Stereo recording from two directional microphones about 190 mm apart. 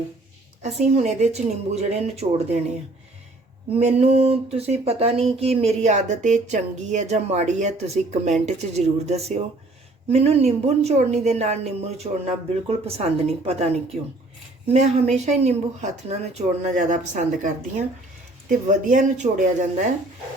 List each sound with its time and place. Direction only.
0.6 s speech: 35° right (ahead or behind)
3.8 s speech: 35° right (ahead or behind)